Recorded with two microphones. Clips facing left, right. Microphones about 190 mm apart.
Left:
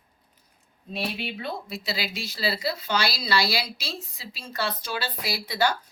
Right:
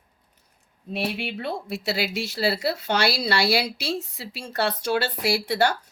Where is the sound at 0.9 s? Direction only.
65° right (ahead or behind).